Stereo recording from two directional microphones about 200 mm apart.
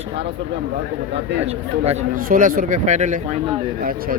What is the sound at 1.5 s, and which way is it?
Speech, 30° right (ahead or behind).